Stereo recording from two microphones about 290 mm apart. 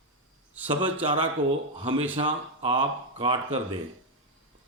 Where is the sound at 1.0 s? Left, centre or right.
Centre.